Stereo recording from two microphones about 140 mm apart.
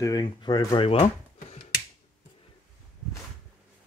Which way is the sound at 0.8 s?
45° left (ahead or behind).